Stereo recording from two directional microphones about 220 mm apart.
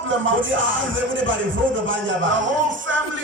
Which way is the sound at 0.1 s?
60° right (ahead or behind).